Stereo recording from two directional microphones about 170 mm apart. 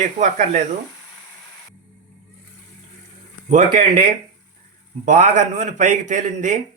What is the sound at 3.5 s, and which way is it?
Speech, 45° right (ahead or behind).